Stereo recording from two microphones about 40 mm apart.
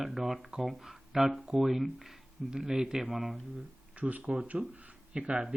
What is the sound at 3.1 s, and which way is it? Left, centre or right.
Speech, centre.